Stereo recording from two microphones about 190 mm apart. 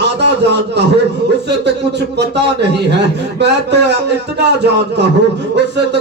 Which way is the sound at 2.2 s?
65° right (ahead or behind).